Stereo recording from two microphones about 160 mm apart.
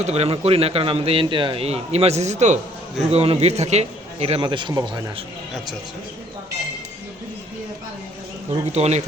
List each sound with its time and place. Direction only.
0.0 s speech: 40° right (ahead or behind)
4.4 s a man's voice: 30° right (ahead or behind)
8.6 s speech: 45° right (ahead or behind)